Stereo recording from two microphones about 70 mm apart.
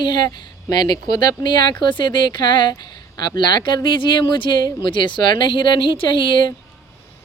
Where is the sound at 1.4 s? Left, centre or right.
Left.